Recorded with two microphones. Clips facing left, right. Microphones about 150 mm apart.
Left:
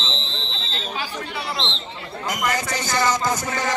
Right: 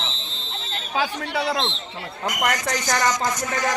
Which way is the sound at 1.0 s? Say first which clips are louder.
Right 5 dB; 75° right (ahead or behind).